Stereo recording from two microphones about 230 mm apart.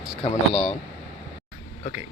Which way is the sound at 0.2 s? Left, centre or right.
Left.